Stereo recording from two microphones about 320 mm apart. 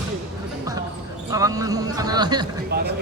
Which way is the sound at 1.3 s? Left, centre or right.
Centre.